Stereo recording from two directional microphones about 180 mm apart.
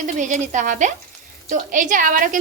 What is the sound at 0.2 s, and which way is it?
A woman's voice, 45° right (ahead or behind).